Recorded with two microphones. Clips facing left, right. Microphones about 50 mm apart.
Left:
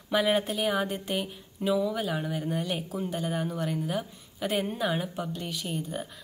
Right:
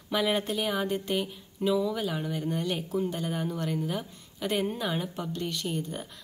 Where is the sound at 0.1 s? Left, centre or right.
Centre.